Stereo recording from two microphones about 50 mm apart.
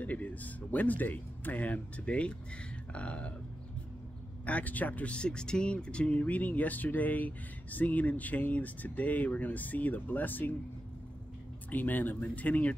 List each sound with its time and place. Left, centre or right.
0.0 s speech: left
2.0 s speech: left
4.5 s speech: left
11.7 s speech: left